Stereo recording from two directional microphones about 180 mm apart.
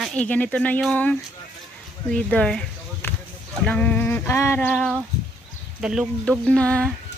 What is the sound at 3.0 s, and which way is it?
Basketball bounce, 10° left (ahead or behind).